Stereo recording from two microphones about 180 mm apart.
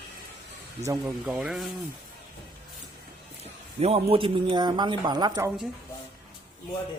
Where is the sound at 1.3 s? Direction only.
Centre (ahead or behind).